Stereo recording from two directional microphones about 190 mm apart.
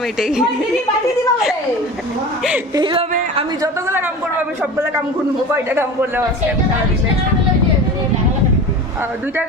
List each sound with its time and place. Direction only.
0.2 s speech: 5° right (ahead or behind)
2.7 s speech: 25° right (ahead or behind)
5.5 s a man's voice: 10° right (ahead or behind)